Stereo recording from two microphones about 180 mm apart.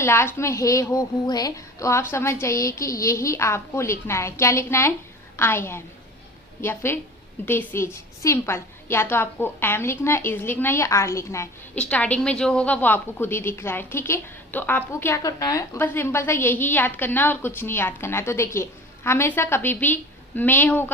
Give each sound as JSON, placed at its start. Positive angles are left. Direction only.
{"t": 0.0, "sound": "a woman's voice", "side_deg": 15}